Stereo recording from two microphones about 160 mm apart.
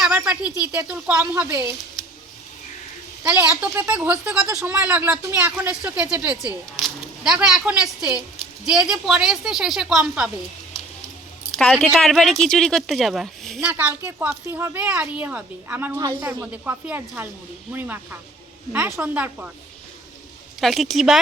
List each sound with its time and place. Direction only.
0.0 s a sound: 5° right (ahead or behind)
0.8 s speech: 15° right (ahead or behind)
3.2 s speech: 10° right (ahead or behind)
11.5 s speech: 5° left (ahead or behind)
20.6 s speech: centre (ahead or behind)